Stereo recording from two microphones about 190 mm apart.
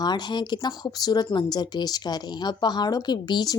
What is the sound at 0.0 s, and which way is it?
Speech, 20° left (ahead or behind).